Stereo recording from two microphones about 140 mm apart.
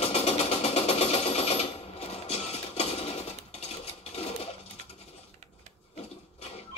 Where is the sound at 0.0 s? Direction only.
45° left (ahead or behind).